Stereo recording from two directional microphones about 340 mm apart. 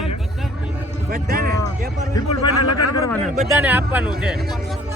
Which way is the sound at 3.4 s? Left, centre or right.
Centre.